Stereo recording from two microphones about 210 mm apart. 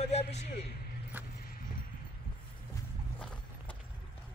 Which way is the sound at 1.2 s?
5° right (ahead or behind).